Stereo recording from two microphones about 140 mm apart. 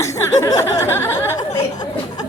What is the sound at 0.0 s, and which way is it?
Speech, 20° left (ahead or behind).